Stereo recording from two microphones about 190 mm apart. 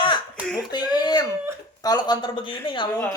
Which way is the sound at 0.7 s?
20° left (ahead or behind).